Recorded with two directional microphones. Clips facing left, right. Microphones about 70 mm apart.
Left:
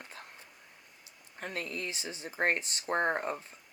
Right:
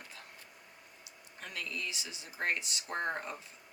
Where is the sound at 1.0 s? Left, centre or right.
Left.